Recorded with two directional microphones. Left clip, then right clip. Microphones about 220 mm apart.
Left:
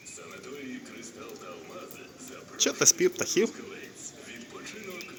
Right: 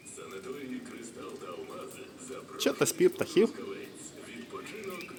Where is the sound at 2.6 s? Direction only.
15° right (ahead or behind).